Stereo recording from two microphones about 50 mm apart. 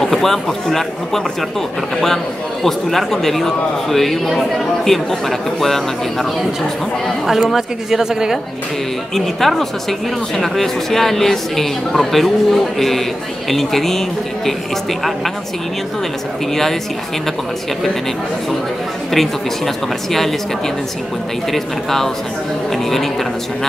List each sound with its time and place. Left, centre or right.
0.0 s speech: centre
2.6 s speech: centre
7.2 s a woman's voice: centre
9.1 s speech: centre
19.1 s speech: centre